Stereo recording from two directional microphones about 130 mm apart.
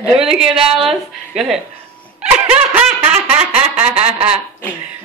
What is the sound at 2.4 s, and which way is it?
Snicker, 10° right (ahead or behind).